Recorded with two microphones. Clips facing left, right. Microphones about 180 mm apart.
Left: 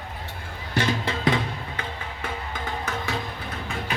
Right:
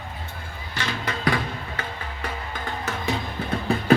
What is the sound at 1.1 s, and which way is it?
Music, 20° left (ahead or behind).